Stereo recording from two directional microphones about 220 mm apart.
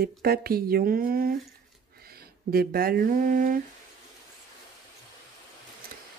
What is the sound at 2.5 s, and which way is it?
Speech, 45° right (ahead or behind).